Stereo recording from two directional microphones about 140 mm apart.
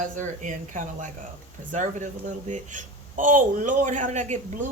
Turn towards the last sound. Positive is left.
turn(degrees=-60)  # may be behind; listen again after turning